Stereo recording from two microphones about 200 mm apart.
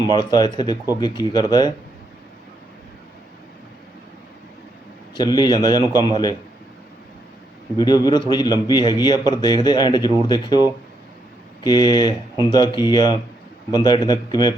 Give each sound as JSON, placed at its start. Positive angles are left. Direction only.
{"t": 0.1, "sound": "a man's voice", "side_deg": 20}
{"t": 5.1, "sound": "a man's voice", "side_deg": 20}
{"t": 7.8, "sound": "a man's voice", "side_deg": 20}
{"t": 11.6, "sound": "a man's voice", "side_deg": 20}